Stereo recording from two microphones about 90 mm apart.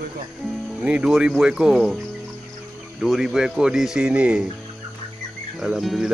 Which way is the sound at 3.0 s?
5° right (ahead or behind).